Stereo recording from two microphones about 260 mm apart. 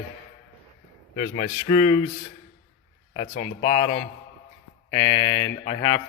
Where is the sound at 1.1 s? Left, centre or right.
Left.